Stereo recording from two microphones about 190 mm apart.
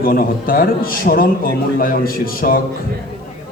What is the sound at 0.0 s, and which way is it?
A man's voice, 50° left (ahead or behind).